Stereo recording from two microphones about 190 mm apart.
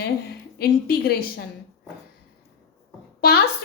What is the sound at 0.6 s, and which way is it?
Speech, 55° left (ahead or behind).